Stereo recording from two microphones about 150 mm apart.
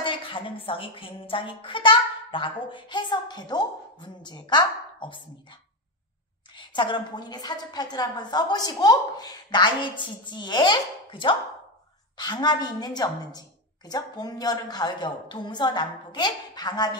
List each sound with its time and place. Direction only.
0.0 s a woman's voice: 35° left (ahead or behind)